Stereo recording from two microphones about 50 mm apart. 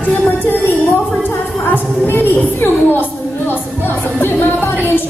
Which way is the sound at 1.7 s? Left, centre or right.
Left.